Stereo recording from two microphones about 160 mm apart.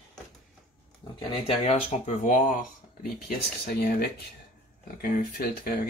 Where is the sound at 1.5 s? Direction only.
45° left (ahead or behind).